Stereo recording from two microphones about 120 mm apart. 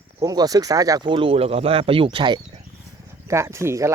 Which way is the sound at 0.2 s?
30° right (ahead or behind).